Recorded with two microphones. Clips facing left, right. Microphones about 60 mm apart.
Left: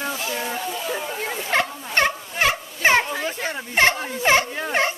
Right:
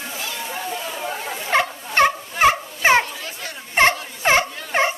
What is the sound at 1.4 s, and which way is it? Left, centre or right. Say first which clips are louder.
Turkey: right 3 dB; centre.